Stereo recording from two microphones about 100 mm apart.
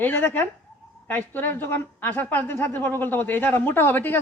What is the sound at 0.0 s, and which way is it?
A woman's voice, 20° left (ahead or behind).